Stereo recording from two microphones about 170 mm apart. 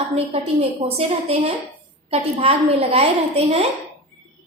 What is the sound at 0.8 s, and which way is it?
A woman's voice, 35° right (ahead or behind).